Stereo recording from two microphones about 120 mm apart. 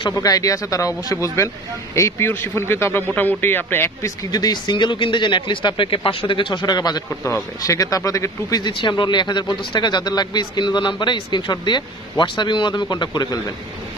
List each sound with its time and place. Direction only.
0.1 s a man's voice: 30° left (ahead or behind)
4.3 s speech: 35° left (ahead or behind)
7.2 s speech: 25° left (ahead or behind)